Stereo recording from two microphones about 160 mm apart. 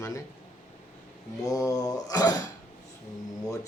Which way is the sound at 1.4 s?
20° left (ahead or behind).